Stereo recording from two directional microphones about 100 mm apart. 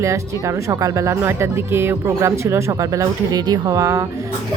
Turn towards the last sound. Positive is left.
turn(degrees=-30)  # may be behind; listen again after turning